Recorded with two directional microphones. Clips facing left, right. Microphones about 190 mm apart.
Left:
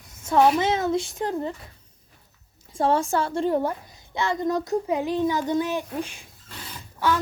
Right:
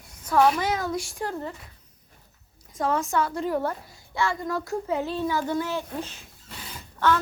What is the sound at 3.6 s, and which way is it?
A child's voice, 15° left (ahead or behind).